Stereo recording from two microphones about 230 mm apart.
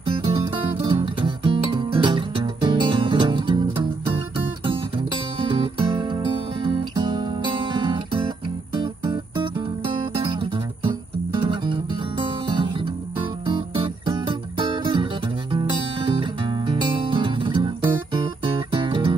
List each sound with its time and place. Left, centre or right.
0.2 s music: right
5.4 s music: right
13.2 s music: right